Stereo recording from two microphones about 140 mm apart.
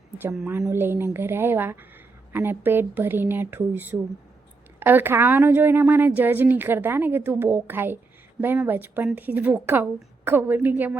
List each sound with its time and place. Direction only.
0.7 s a woman's voice: 15° right (ahead or behind)